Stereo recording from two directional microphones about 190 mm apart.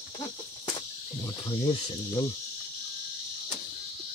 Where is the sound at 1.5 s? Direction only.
30° left (ahead or behind).